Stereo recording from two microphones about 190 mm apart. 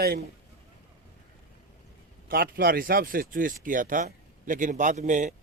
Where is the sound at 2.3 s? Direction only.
50° right (ahead or behind).